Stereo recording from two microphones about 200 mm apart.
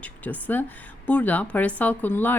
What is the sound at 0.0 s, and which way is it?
Speech, 10° left (ahead or behind).